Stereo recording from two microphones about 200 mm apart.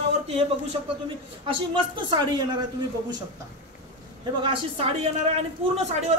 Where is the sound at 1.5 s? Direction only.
25° right (ahead or behind).